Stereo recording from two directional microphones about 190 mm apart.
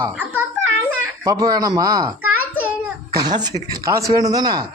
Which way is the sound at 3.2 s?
20° right (ahead or behind).